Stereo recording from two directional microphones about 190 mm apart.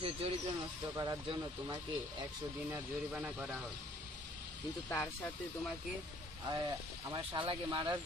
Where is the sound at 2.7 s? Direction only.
5° right (ahead or behind).